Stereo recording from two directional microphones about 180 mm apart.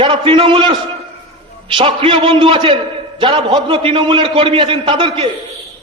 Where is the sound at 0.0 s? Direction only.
30° right (ahead or behind).